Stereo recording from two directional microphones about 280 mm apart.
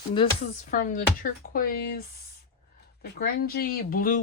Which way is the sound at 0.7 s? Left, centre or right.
Left.